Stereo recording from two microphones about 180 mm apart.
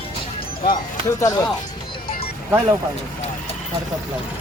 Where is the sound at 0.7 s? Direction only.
20° left (ahead or behind).